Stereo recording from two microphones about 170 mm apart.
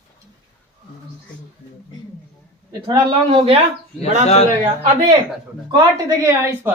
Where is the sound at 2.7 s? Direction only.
25° right (ahead or behind).